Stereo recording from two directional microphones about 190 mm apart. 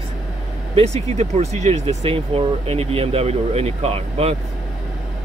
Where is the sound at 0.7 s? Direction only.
35° right (ahead or behind).